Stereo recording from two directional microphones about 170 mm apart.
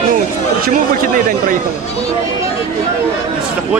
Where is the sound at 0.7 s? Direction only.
50° right (ahead or behind).